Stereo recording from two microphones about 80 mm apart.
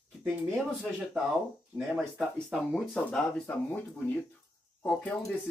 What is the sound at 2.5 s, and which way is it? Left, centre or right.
Speech, centre.